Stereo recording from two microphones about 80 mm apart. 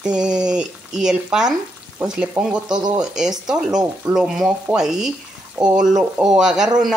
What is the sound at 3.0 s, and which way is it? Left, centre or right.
Speech, centre.